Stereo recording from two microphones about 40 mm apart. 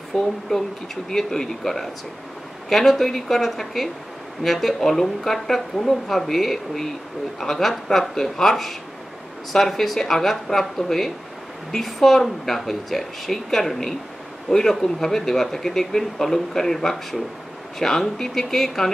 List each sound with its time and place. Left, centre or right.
0.1 s a woman's voice: centre